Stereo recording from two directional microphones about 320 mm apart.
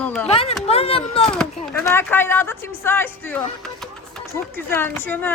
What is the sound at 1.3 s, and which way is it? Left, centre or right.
Speech, centre.